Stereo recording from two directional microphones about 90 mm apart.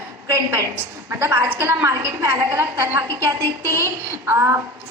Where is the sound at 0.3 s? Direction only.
35° right (ahead or behind).